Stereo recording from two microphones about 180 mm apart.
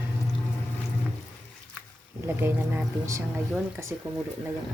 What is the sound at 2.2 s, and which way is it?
Speech, 10° right (ahead or behind).